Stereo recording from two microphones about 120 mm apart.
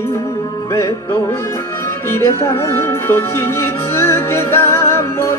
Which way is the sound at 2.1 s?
20° left (ahead or behind).